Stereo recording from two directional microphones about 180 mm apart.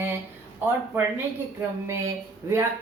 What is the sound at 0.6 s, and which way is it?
Speech, 10° right (ahead or behind).